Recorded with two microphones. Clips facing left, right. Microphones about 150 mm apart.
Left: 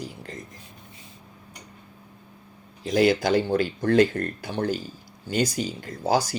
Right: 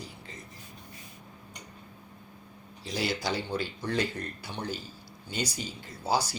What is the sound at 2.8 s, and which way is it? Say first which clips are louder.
Speech: left 11 dB; 50° left (ahead or behind).